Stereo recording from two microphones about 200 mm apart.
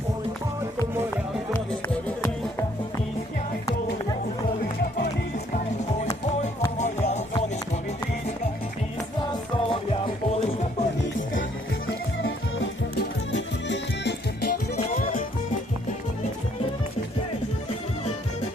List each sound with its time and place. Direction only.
6.7 s music: 35° left (ahead or behind)
9.3 s music: 25° left (ahead or behind)
12.2 s music: 65° left (ahead or behind)
14.8 s music: 40° left (ahead or behind)